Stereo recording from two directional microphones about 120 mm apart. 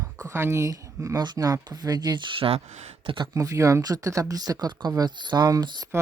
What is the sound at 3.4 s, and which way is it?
Speech, 25° right (ahead or behind).